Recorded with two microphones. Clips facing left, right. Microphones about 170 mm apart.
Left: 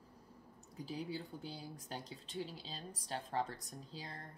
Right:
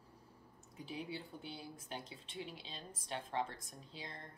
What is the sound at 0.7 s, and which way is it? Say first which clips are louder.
Speech: left 2 dB; 35° left (ahead or behind).